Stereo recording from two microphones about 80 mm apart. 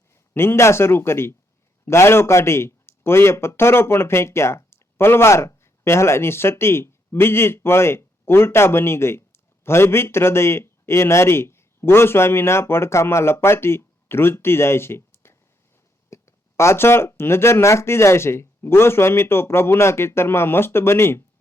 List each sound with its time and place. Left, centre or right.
0.3 s speech: left